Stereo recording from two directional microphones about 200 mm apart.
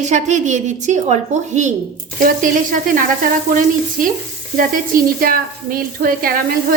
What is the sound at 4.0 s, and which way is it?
Sizzle, 45° right (ahead or behind).